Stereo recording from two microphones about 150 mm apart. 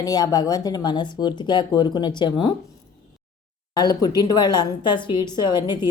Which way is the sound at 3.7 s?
25° left (ahead or behind).